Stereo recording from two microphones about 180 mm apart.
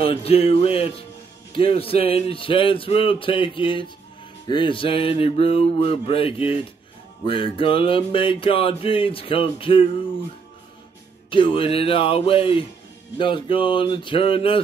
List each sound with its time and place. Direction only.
0.0 s music: 35° left (ahead or behind)
11.2 s music: 30° left (ahead or behind)